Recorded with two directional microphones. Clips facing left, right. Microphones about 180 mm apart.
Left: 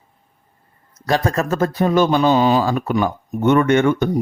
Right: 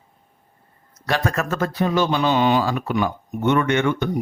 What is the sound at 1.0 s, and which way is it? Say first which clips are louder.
Speech: left 4 dB; 35° left (ahead or behind).